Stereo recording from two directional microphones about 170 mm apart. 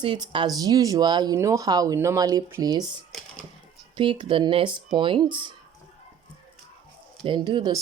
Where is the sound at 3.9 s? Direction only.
30° right (ahead or behind).